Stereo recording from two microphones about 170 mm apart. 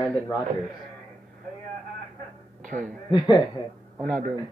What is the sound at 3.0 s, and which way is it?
Speech, 25° left (ahead or behind).